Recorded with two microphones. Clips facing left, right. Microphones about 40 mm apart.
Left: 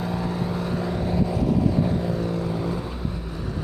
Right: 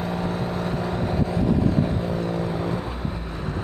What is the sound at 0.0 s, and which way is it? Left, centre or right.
Vehicle, centre.